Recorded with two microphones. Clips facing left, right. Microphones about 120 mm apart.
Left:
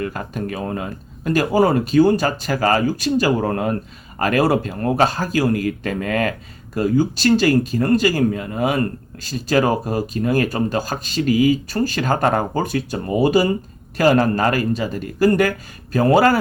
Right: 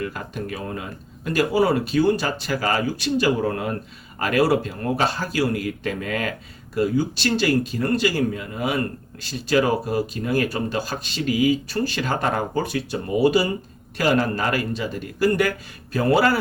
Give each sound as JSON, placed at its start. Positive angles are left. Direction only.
{"t": 0.0, "sound": "speech", "side_deg": 45}